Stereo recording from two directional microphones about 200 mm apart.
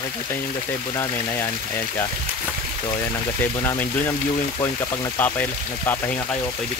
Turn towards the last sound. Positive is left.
turn(degrees=10)  # may be behind; listen again after turning